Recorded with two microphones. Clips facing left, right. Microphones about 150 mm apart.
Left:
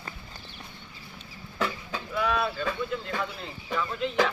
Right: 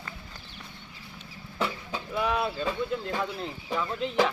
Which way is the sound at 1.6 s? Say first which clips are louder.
Even; 25° right (ahead or behind).